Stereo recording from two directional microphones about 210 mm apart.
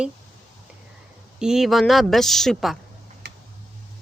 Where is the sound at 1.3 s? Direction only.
5° right (ahead or behind).